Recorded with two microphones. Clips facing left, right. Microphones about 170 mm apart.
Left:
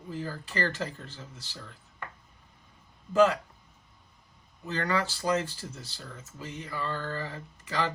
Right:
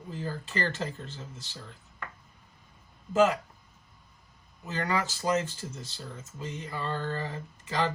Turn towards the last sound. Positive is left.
turn(degrees=-25)  # may be behind; listen again after turning